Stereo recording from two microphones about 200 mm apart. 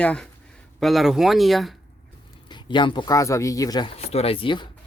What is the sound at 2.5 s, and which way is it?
Speech, 25° left (ahead or behind).